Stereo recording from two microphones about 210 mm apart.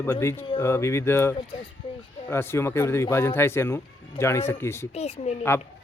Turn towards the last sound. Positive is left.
turn(degrees=30)  # may be behind; listen again after turning